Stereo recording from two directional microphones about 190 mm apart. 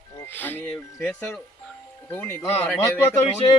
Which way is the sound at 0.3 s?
10° left (ahead or behind).